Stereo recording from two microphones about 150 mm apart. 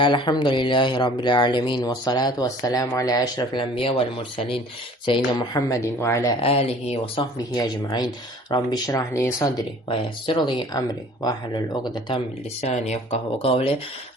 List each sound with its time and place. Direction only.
0.0 s speech: 30° left (ahead or behind)
5.5 s speech: 20° left (ahead or behind)
6.4 s speech: 40° left (ahead or behind)
7.3 s speech: 25° left (ahead or behind)
9.9 s speech: 30° left (ahead or behind)
12.6 s speech: 50° left (ahead or behind)